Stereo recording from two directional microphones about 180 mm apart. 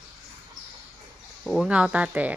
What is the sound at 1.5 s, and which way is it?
Speech, centre (ahead or behind).